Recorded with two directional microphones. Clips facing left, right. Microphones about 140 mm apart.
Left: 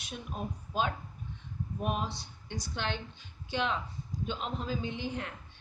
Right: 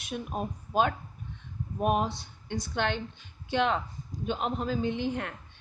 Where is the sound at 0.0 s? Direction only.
50° right (ahead or behind).